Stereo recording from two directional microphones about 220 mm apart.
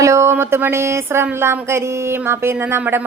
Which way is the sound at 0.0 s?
10° right (ahead or behind).